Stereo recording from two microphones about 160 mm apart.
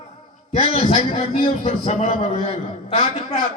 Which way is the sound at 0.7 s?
45° left (ahead or behind).